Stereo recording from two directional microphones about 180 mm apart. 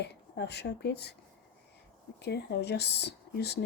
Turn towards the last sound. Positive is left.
turn(degrees=65)  # may be behind; listen again after turning